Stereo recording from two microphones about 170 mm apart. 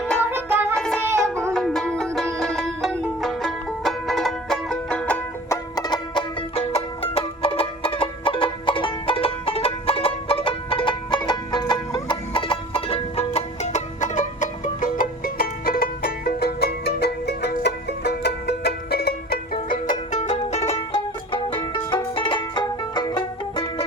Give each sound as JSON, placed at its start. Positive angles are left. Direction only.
{"t": 0.2, "sound": "music", "side_deg": -10}
{"t": 0.8, "sound": "music", "side_deg": 0}
{"t": 1.0, "sound": "music", "side_deg": -15}
{"t": 1.5, "sound": "banjo", "side_deg": 0}
{"t": 2.4, "sound": "music", "side_deg": 0}
{"t": 5.7, "sound": "music", "side_deg": 25}